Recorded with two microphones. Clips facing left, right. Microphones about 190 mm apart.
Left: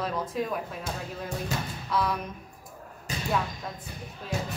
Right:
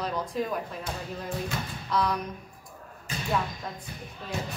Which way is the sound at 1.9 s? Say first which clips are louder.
Right 1 dB; 5° left (ahead or behind).